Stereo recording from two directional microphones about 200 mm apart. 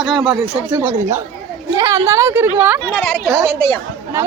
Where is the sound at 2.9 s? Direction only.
5° left (ahead or behind).